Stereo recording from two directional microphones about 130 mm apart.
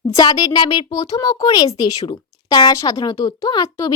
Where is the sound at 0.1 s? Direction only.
30° left (ahead or behind).